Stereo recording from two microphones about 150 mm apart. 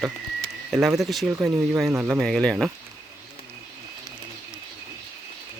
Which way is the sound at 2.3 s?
5° left (ahead or behind).